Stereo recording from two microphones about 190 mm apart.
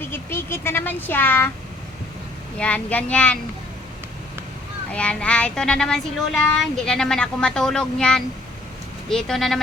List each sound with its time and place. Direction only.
0.1 s speech: 10° left (ahead or behind)
2.6 s speech: 5° left (ahead or behind)
4.9 s child singing: 5° left (ahead or behind)